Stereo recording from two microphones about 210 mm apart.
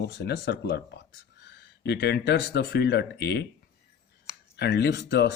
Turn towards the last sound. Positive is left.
turn(degrees=55)  # may be behind; listen again after turning